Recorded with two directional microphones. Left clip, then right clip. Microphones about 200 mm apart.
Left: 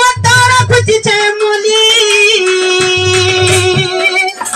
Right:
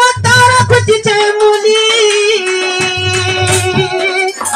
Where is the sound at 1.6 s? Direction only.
60° left (ahead or behind).